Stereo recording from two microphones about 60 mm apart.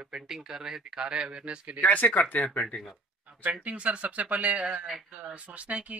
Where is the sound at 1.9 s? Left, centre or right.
Left.